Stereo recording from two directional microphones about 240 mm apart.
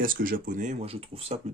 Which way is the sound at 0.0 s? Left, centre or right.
Right.